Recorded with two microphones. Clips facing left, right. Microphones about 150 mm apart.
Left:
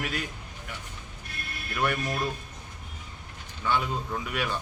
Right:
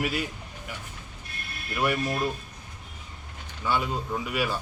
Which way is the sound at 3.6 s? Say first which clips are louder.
Right 1 dB; 5° right (ahead or behind).